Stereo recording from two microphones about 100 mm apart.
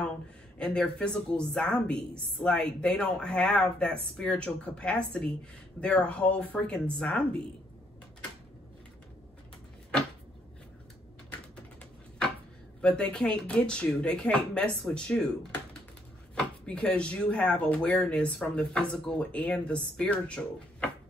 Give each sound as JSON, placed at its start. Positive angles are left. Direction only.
{"t": 0.6, "sound": "speech", "side_deg": 10}
{"t": 12.8, "sound": "speech", "side_deg": 10}